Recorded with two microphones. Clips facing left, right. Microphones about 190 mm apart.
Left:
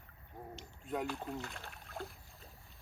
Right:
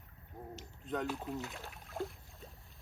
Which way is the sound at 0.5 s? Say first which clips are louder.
Right 1 dB; centre (ahead or behind).